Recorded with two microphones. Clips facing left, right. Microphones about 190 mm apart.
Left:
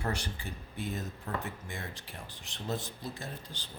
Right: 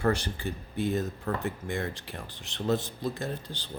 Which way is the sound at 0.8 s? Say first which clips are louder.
Right 9 dB; 85° right.